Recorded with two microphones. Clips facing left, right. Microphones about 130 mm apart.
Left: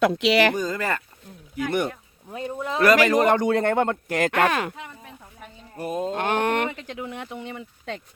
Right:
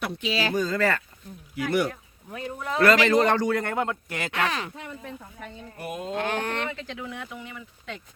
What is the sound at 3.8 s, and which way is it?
Speech, 45° left (ahead or behind).